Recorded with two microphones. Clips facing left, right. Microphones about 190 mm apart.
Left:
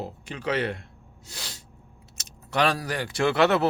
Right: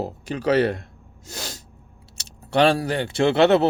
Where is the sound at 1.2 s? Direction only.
45° right (ahead or behind).